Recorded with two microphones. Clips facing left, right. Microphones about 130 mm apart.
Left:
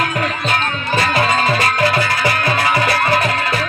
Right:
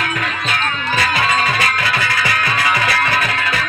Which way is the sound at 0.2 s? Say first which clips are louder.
Left 2 dB; 35° left (ahead or behind).